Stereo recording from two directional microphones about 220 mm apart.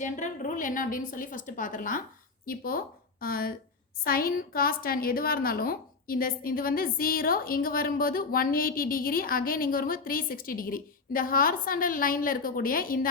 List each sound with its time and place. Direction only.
0.0 s a woman's voice: 35° left (ahead or behind)